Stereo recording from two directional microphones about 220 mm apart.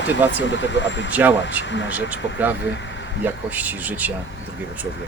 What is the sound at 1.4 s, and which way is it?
Speech, 55° left (ahead or behind).